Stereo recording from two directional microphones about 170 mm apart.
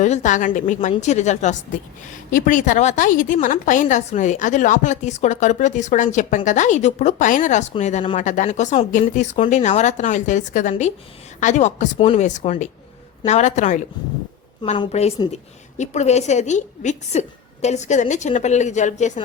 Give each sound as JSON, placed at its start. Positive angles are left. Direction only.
{"t": 0.0, "sound": "a woman's voice", "side_deg": 45}
{"t": 14.9, "sound": "a woman's voice", "side_deg": 40}